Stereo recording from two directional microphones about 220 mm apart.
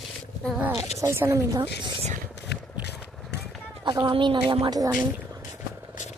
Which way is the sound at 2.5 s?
50° left (ahead or behind).